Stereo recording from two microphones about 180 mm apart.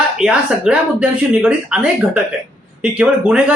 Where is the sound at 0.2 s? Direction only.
5° right (ahead or behind).